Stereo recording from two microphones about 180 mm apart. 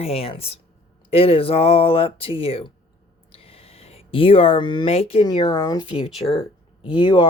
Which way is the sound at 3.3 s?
30° left (ahead or behind).